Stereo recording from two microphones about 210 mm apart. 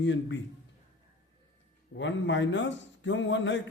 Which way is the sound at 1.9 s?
60° left (ahead or behind).